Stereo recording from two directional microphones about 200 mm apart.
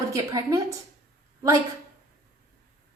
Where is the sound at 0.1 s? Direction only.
15° right (ahead or behind).